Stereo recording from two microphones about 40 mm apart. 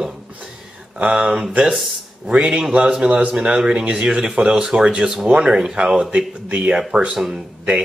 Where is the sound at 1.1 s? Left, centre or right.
Right.